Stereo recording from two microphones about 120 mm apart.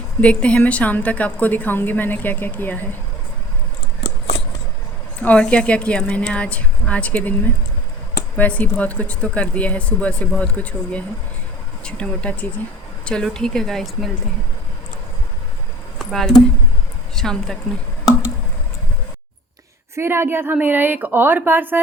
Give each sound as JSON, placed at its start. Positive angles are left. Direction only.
{"t": 0.2, "sound": "a woman's voice", "side_deg": 10}
{"t": 5.2, "sound": "a woman's voice", "side_deg": 10}
{"t": 16.0, "sound": "a sound", "side_deg": 5}
{"t": 17.2, "sound": "speech", "side_deg": 5}
{"t": 20.0, "sound": "a woman's voice", "side_deg": -20}